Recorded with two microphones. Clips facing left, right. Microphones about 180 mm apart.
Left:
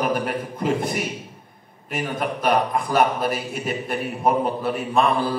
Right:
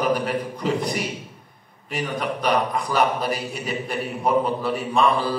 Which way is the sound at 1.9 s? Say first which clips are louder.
Even; 50° left (ahead or behind).